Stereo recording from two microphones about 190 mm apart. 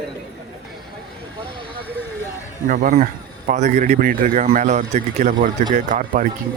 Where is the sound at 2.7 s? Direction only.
40° right (ahead or behind).